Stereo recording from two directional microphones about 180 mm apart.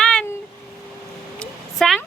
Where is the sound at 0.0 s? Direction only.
5° left (ahead or behind).